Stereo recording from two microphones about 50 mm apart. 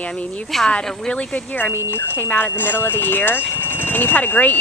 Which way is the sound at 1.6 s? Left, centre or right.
Left.